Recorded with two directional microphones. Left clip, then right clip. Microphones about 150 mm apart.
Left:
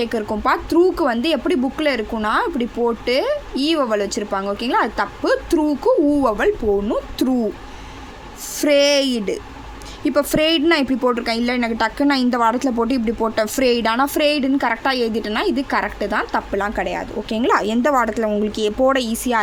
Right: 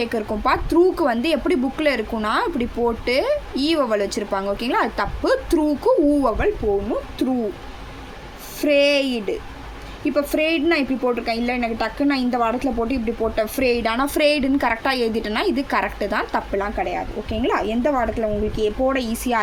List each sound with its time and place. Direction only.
0.0 s speech: 20° left (ahead or behind)
7.2 s owl: 55° left (ahead or behind)
8.6 s a woman's voice: 45° left (ahead or behind); by 16.6 s 20° left (ahead or behind)
16.6 s a woman's voice: 40° left (ahead or behind)